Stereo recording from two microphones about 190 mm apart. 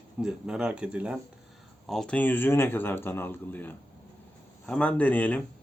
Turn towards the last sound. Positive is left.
turn(degrees=5)  # may be behind; listen again after turning